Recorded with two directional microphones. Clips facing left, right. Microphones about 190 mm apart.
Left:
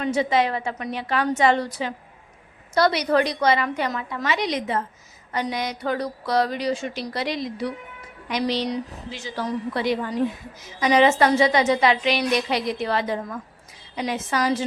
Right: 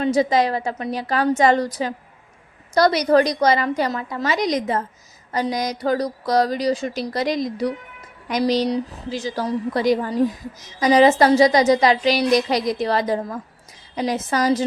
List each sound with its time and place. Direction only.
0.0 s a woman's voice: 40° right (ahead or behind)